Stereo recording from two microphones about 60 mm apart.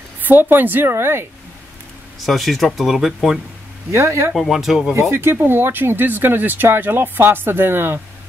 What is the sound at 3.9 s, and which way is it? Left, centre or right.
Speech, right.